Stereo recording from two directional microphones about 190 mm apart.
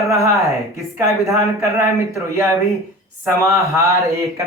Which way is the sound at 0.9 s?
15° right (ahead or behind).